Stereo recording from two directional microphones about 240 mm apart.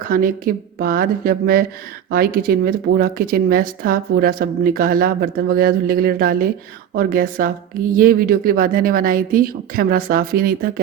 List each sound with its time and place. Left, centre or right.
0.1 s speech: right